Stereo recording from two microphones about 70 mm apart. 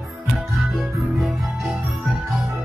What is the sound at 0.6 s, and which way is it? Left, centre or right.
Music, centre.